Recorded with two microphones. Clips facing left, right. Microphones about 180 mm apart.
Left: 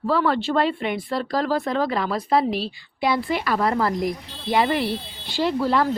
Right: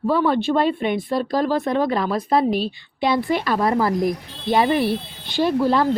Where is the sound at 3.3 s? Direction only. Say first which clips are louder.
Right 2 dB; 25° right (ahead or behind).